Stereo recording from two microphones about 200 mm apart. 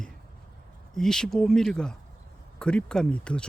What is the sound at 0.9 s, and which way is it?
Speech, centre (ahead or behind).